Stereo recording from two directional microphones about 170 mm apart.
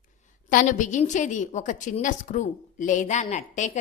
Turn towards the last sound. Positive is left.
turn(degrees=45)  # may be behind; listen again after turning